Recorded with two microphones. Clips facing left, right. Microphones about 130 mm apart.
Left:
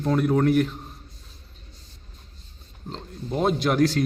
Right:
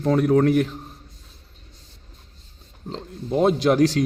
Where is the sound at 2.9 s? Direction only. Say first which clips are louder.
Right 5 dB; 25° right (ahead or behind).